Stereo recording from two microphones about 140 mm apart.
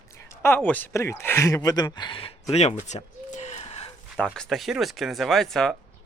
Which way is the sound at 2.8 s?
55° left (ahead or behind).